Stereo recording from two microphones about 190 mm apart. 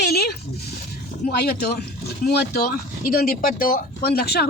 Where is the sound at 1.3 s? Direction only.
60° left (ahead or behind).